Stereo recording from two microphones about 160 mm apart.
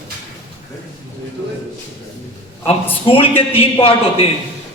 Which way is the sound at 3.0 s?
35° left (ahead or behind).